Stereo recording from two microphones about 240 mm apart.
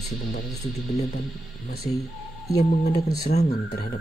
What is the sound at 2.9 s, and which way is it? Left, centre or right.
Speech, left.